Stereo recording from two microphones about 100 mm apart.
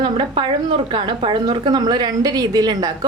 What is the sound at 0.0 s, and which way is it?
A woman's voice, 55° right (ahead or behind).